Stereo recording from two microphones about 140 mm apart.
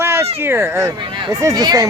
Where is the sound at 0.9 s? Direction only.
35° right (ahead or behind).